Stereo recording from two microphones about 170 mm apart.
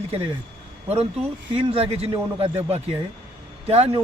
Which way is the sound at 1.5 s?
35° right (ahead or behind).